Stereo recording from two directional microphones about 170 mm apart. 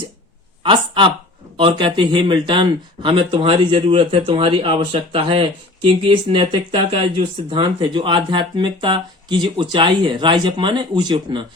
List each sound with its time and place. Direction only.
0.6 s speech: 30° right (ahead or behind)